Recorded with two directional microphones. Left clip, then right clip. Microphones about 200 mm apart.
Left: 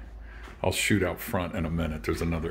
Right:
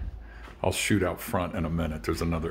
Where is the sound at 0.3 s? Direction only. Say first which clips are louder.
Even; centre (ahead or behind).